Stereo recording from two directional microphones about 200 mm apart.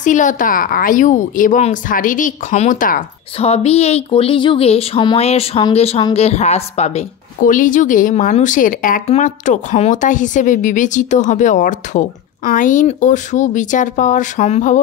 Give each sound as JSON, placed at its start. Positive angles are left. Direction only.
{"t": 0.0, "sound": "a woman's voice", "side_deg": 40}
{"t": 3.3, "sound": "a woman's voice", "side_deg": 30}